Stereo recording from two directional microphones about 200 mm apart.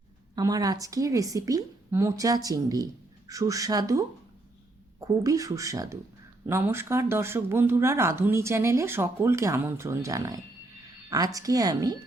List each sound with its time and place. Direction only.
0.3 s speech: 15° right (ahead or behind)